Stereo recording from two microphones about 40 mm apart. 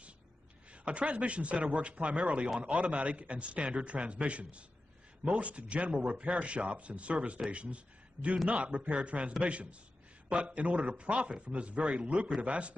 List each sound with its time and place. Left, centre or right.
0.7 s a man's voice: right